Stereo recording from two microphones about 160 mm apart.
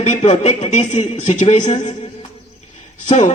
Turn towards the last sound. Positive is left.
turn(degrees=50)  # may be behind; listen again after turning